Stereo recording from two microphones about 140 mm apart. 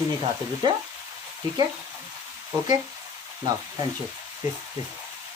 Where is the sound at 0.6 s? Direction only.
35° right (ahead or behind).